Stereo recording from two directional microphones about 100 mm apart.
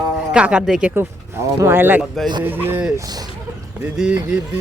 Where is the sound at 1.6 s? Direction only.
20° right (ahead or behind).